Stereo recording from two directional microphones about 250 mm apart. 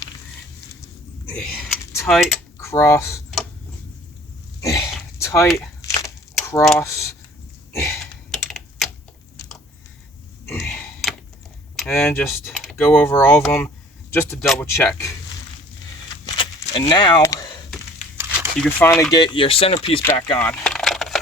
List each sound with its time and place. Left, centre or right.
1.4 s speech: centre
2.6 s speech: centre
4.6 s a sound: centre
6.4 s typing: centre
6.7 s speech: centre
7.8 s computer keyboard: centre
10.6 s tick-tock: centre
11.8 s speech: centre
14.7 s speech: centre
16.2 s a sound: centre
18.6 s speech: centre
20.4 s a sound: centre